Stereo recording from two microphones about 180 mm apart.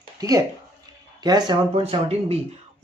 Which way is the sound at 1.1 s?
25° right (ahead or behind).